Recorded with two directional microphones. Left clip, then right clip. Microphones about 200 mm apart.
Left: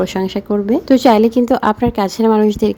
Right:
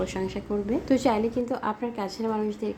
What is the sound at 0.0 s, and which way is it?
A woman's voice, 45° left (ahead or behind).